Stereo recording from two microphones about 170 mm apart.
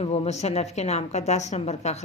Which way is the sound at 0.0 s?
35° left (ahead or behind).